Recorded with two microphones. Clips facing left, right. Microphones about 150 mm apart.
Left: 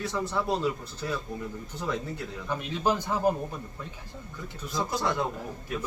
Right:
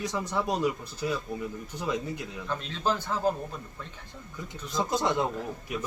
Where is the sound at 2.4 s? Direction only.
10° left (ahead or behind).